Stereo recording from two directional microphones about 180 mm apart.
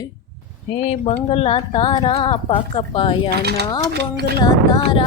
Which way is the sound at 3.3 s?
65° right (ahead or behind).